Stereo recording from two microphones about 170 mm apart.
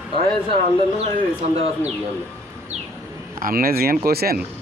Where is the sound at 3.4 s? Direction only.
60° right (ahead or behind).